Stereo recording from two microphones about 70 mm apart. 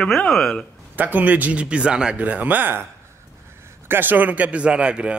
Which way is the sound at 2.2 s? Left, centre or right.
Right.